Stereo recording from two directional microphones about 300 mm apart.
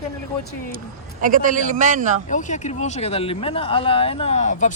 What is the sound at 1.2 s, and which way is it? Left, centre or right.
Speech, right.